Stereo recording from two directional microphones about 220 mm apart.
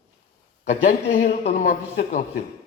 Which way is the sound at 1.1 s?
40° left (ahead or behind).